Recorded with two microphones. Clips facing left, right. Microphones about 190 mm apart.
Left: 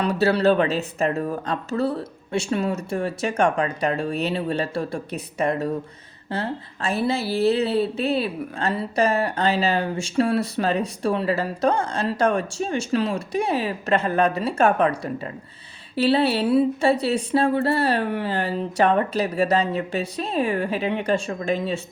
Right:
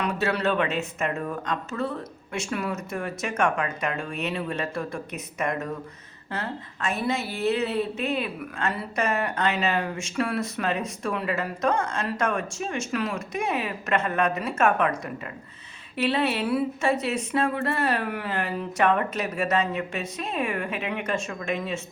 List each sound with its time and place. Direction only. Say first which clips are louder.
0.0 s speech: left 6 dB; 35° left (ahead or behind)